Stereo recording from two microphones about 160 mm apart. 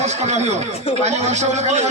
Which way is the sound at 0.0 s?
45° right (ahead or behind).